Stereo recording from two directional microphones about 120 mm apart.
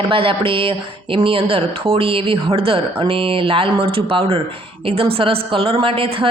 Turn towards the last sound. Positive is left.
turn(degrees=-50)  # may be behind; listen again after turning